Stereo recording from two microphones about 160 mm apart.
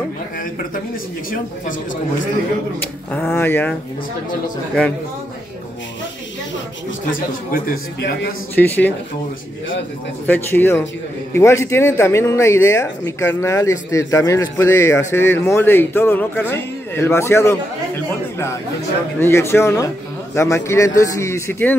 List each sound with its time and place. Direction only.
3.1 s speech: 10° left (ahead or behind)
7.1 s a man's voice: 60° left (ahead or behind); by 8.4 s 80° left
8.5 s speech: 10° left (ahead or behind)
10.2 s speech: 10° left (ahead or behind)
19.1 s speech: 15° left (ahead or behind)